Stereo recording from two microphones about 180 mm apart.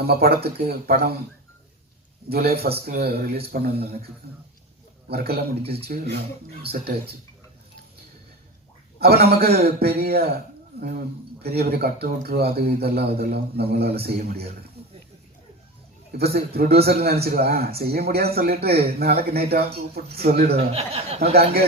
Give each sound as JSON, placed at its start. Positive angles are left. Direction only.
{"t": 0.0, "sound": "speech", "side_deg": -60}
{"t": 2.3, "sound": "speech", "side_deg": -60}
{"t": 5.0, "sound": "speech", "side_deg": -60}
{"t": 9.0, "sound": "speech", "side_deg": -60}
{"t": 11.4, "sound": "speech", "side_deg": -60}
{"t": 16.1, "sound": "speech", "side_deg": -60}
{"t": 20.7, "sound": "speech", "side_deg": -35}